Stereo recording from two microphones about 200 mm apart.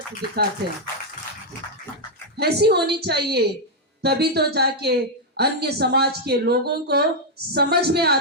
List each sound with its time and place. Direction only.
2.4 s speech: 55° right (ahead or behind)